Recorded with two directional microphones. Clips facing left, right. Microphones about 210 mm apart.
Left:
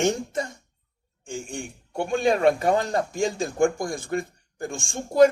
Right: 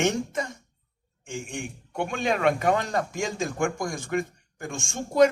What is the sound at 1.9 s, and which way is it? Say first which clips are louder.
A man's voice: left 5 dB; 35° left (ahead or behind).